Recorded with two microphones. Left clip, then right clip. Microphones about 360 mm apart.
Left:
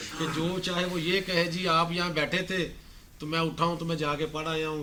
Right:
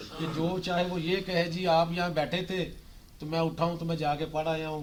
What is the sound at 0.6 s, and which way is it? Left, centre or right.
Speech, right.